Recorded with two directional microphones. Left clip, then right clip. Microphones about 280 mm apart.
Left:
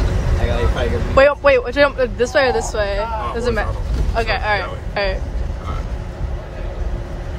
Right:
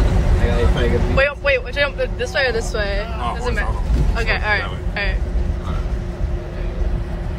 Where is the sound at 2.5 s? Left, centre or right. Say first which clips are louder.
Left 3 dB; centre.